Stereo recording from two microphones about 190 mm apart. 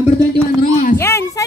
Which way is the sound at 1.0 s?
15° left (ahead or behind).